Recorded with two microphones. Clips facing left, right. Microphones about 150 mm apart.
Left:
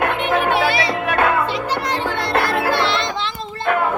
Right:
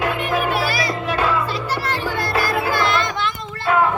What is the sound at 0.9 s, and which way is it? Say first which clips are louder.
Music: left 3 dB; 60° left (ahead or behind).